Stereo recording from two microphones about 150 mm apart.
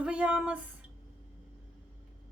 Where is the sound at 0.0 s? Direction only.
5° right (ahead or behind).